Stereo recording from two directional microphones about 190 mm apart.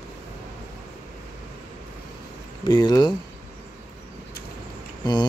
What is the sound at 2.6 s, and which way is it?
Speech, 20° left (ahead or behind).